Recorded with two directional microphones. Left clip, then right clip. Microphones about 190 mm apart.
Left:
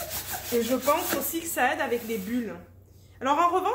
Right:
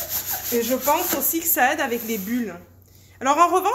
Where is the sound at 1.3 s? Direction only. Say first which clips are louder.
Right 7 dB; 50° right (ahead or behind).